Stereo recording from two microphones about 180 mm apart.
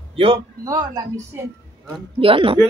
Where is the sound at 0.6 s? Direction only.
20° right (ahead or behind).